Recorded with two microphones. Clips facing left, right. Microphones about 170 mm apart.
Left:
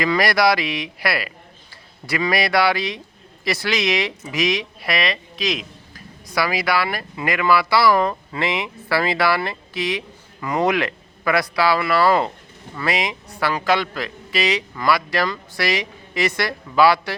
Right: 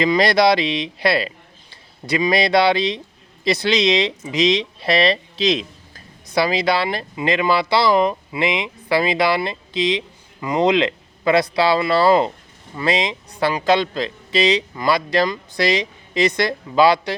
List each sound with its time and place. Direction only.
0.0 s speech: 20° right (ahead or behind)